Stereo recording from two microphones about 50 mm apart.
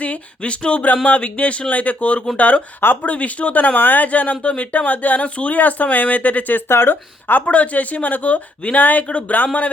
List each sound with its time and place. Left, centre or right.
0.0 s speech: left
6.7 s speech: left